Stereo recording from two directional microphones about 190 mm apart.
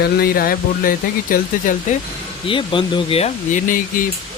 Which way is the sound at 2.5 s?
25° left (ahead or behind).